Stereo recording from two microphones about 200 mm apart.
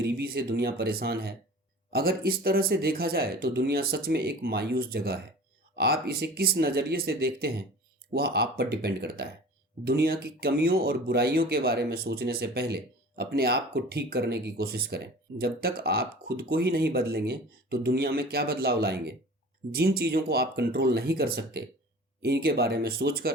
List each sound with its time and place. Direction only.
0.0 s speech: 50° right (ahead or behind)